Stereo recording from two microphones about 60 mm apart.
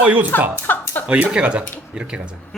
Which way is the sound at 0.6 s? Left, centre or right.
Left.